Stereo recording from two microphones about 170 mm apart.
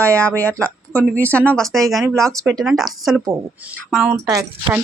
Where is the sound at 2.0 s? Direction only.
15° right (ahead or behind).